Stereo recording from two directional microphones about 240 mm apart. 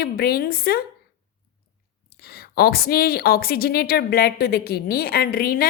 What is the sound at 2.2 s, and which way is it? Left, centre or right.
A woman's voice, left.